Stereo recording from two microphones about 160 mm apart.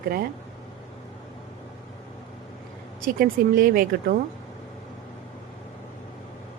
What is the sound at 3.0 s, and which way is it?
Speech, 65° right (ahead or behind).